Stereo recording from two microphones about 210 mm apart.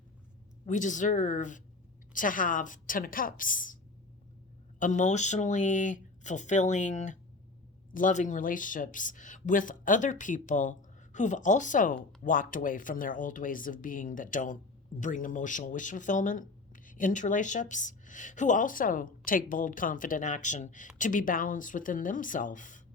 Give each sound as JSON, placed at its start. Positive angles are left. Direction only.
{"t": 0.6, "sound": "speech", "side_deg": 35}
{"t": 4.8, "sound": "speech", "side_deg": 35}